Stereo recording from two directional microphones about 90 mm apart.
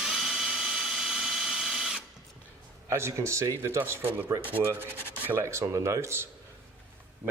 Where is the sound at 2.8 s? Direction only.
30° right (ahead or behind).